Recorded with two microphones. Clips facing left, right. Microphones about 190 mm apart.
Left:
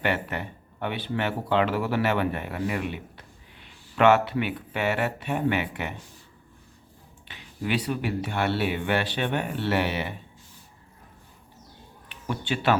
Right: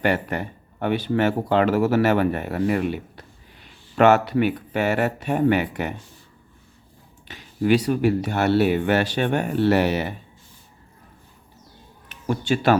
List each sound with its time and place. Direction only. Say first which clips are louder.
0.0 s speech: right 5 dB; 40° right (ahead or behind)
7.3 s speech: right 10 dB; 45° right (ahead or behind)
12.0 s a sound: right 7 dB; 40° right (ahead or behind)